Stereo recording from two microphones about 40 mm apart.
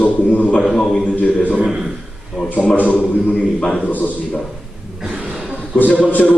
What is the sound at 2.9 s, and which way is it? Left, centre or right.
Speech, centre.